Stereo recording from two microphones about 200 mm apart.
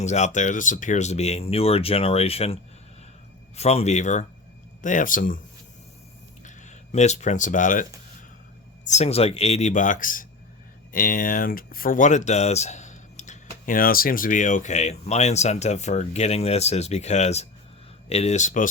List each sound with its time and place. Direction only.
0.0 s speech: 35° left (ahead or behind)
6.4 s speech: 35° left (ahead or behind)
8.9 s speech: 30° left (ahead or behind)